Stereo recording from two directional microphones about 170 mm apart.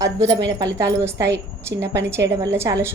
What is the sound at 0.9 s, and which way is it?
A woman's voice, 15° right (ahead or behind).